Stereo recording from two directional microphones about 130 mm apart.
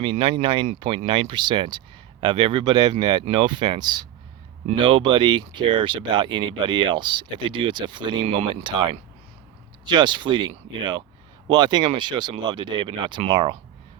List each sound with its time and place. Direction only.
0.0 s speech: 45° right (ahead or behind)